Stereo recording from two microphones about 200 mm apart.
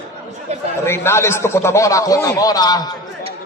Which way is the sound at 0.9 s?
10° left (ahead or behind).